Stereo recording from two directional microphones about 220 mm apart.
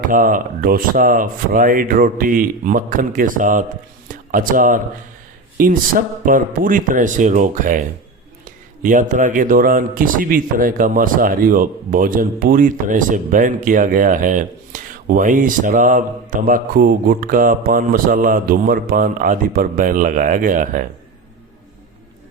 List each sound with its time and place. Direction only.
0.1 s speech: 40° right (ahead or behind)